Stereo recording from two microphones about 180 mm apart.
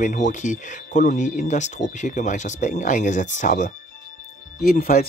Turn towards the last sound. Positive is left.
turn(degrees=55)  # may be behind; listen again after turning